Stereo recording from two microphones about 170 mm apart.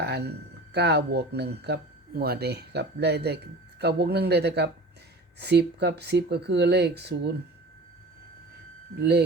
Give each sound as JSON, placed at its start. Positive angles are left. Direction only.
{"t": 0.0, "sound": "speech", "side_deg": -75}
{"t": 9.0, "sound": "speech", "side_deg": -75}